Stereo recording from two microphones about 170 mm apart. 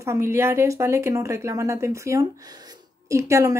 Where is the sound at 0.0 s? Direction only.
15° right (ahead or behind).